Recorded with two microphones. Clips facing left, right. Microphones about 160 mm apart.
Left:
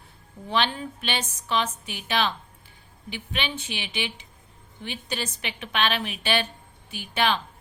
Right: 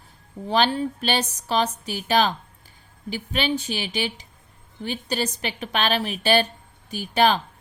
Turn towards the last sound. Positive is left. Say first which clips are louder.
# right 5 dB
turn(degrees=-40)  # may be behind; listen again after turning